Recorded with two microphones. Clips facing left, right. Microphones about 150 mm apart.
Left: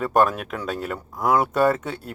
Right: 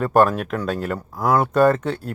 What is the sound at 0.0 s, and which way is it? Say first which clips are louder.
Speech: right 3 dB; 5° left (ahead or behind).